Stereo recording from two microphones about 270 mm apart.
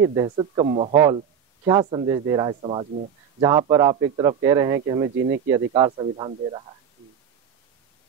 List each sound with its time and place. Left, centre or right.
0.0 s speech: centre
0.9 s a man's voice: centre